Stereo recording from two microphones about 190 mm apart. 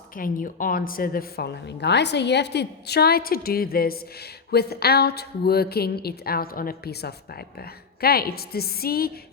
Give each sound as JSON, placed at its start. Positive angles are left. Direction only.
{"t": 0.2, "sound": "a woman's voice", "side_deg": 45}